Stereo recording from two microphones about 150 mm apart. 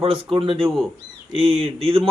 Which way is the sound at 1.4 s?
40° right (ahead or behind).